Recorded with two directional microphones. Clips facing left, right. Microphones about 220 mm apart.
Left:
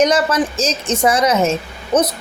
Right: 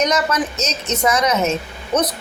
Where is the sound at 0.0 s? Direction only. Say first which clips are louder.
Left 4 dB; 30° left (ahead or behind).